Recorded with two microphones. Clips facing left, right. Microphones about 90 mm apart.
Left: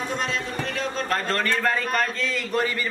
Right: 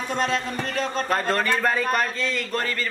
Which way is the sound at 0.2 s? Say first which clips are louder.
Right 3 dB; 40° right (ahead or behind).